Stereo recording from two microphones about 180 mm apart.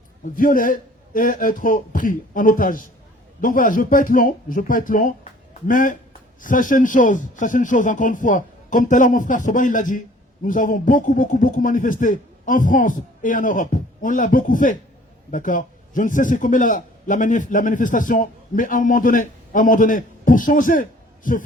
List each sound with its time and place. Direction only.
0.3 s a man's voice: 50° left (ahead or behind)